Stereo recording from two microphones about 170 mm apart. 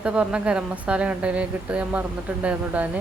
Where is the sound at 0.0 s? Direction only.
5° right (ahead or behind).